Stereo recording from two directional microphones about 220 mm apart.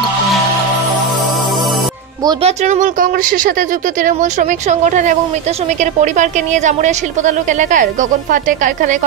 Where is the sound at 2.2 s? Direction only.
30° right (ahead or behind).